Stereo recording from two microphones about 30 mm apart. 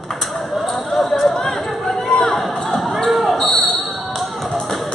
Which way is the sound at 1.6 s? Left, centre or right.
Centre.